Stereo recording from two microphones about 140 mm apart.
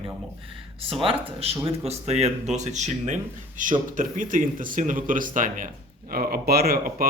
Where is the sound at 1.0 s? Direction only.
40° right (ahead or behind); by 5.6 s 70° right (ahead or behind).